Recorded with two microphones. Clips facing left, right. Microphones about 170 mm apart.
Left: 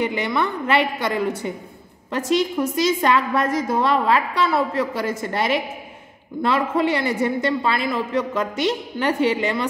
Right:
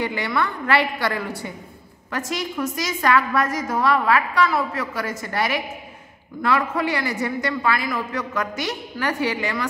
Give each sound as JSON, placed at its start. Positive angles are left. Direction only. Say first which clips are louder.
{"t": 0.0, "sound": "a woman's voice", "louder": "left 2 dB", "side_deg": 20}